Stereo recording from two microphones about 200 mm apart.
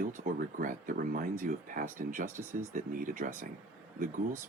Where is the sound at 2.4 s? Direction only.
10° right (ahead or behind).